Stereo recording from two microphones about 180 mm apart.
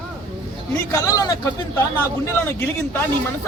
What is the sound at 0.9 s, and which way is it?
Speech, 20° left (ahead or behind).